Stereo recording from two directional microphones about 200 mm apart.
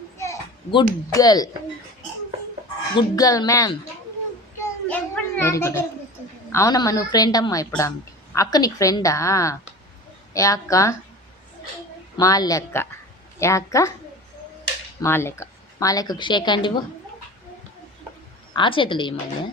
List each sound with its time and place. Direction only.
0.2 s children playing: 20° left (ahead or behind)
1.1 s a woman's voice: 20° left (ahead or behind)
2.9 s a woman's voice: 20° left (ahead or behind)
4.6 s children playing: 10° left (ahead or behind)
6.5 s a woman's voice: 15° left (ahead or behind)
12.1 s a woman's voice: 20° left (ahead or behind)
15.0 s a woman's voice: 10° left (ahead or behind)
18.5 s a woman's voice: 25° left (ahead or behind)